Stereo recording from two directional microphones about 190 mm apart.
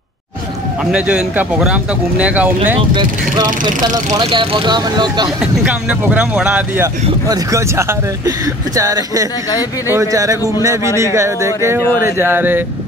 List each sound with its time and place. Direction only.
0.9 s speech: 5° right (ahead or behind)
2.9 s speech: 25° right (ahead or behind)
5.4 s speech: 5° right (ahead or behind)
7.2 s speech: 20° right (ahead or behind)